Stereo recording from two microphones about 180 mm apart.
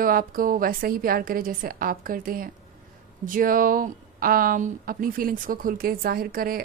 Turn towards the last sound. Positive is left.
turn(degrees=-55)  # may be behind; listen again after turning